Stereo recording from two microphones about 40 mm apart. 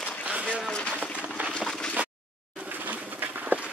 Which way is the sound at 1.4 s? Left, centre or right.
Right.